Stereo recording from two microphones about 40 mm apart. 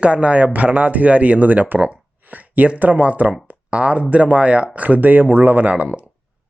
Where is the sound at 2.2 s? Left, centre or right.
Right.